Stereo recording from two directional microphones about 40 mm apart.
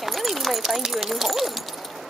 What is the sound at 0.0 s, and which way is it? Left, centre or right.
Speech, centre.